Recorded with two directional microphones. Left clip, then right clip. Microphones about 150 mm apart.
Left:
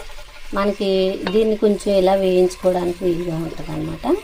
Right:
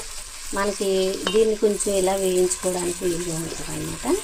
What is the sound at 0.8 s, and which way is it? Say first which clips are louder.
Stir: left 4 dB; 20° left (ahead or behind).